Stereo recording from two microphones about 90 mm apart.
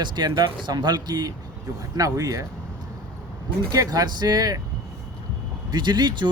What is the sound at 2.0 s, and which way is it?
Speech, 40° right (ahead or behind).